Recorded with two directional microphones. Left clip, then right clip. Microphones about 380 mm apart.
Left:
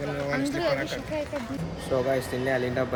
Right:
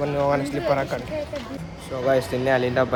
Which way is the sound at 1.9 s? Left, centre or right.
Centre.